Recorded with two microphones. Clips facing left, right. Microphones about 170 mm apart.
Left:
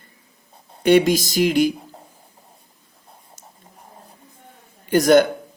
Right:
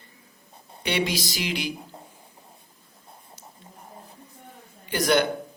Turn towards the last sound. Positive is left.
turn(degrees=45)  # may be behind; listen again after turning